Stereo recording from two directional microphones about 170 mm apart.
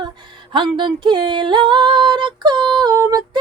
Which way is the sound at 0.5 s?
30° right (ahead or behind).